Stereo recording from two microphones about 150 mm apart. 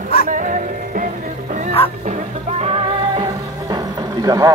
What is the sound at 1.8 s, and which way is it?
Music, 40° left (ahead or behind).